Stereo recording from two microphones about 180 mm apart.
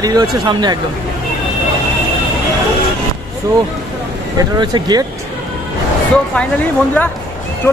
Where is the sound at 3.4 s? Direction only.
20° right (ahead or behind).